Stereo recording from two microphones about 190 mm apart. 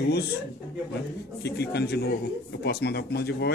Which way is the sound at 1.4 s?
60° left (ahead or behind).